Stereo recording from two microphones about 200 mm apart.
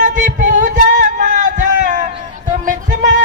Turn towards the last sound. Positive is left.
turn(degrees=-40)  # may be behind; listen again after turning